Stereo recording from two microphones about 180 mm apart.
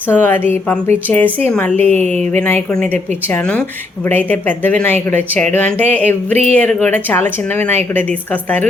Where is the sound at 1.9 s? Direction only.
40° right (ahead or behind).